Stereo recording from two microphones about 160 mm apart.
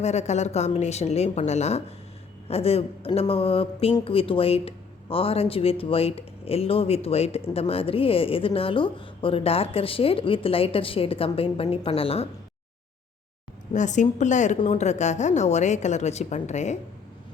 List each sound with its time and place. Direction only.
0.0 s a woman's voice: 45° left (ahead or behind)
13.7 s a woman's voice: 50° left (ahead or behind)